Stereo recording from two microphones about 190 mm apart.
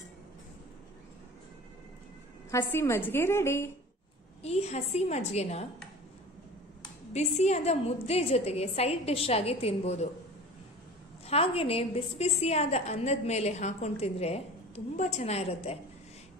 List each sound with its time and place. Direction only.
2.5 s a woman's voice: 15° left (ahead or behind)
4.4 s a woman's voice: 35° left (ahead or behind)
7.3 s a woman's voice: 35° left (ahead or behind)
11.2 s a woman's voice: 30° left (ahead or behind)